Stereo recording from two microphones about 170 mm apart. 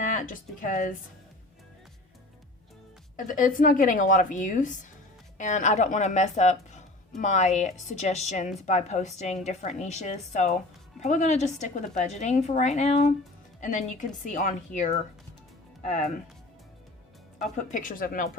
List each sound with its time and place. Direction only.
0.0 s speech: 50° left (ahead or behind)
3.2 s a woman's voice: 50° left (ahead or behind)
17.7 s a woman's voice: 50° left (ahead or behind)